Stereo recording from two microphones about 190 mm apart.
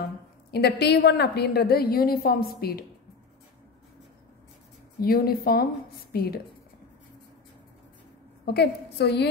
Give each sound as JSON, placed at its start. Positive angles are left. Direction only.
{"t": 0.5, "sound": "a woman's voice", "side_deg": 60}
{"t": 5.0, "sound": "a woman's voice", "side_deg": 50}
{"t": 8.5, "sound": "a woman's voice", "side_deg": 60}